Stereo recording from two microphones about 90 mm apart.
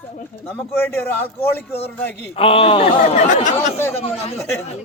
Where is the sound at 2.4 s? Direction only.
90° left.